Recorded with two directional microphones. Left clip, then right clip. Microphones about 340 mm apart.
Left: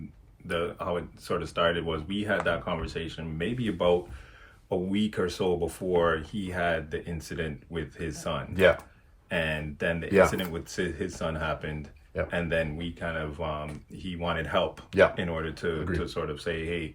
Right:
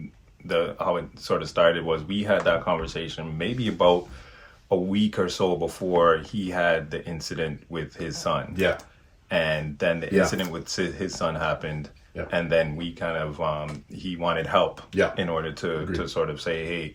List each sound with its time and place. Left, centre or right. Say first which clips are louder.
0.4 s speech: right 6 dB; centre